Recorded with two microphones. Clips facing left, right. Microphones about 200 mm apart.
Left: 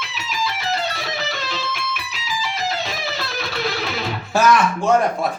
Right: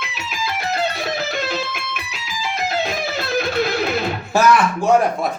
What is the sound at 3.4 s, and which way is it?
Music, 50° right (ahead or behind).